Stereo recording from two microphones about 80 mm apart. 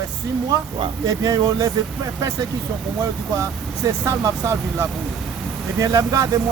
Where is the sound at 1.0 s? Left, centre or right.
Right.